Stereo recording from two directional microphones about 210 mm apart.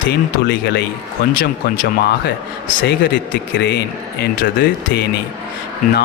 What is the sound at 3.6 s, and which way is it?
Speech, 50° left (ahead or behind).